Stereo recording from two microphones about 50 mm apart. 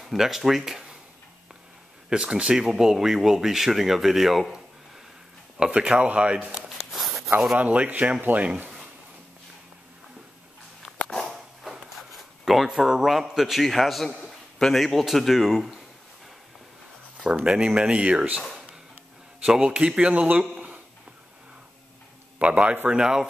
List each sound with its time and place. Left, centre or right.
0.0 s speech: centre
2.0 s speech: centre
5.6 s speech: centre
6.9 s a sound: centre
7.5 s speech: right
11.1 s a sound: centre
12.6 s a man's voice: centre
14.2 s a sound: centre
15.0 s a man's voice: centre
17.5 s speech: centre
19.4 s speech: centre
22.4 s speech: right
22.8 s speech: centre